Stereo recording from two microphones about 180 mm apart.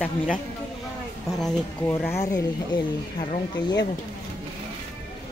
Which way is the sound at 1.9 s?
15° left (ahead or behind).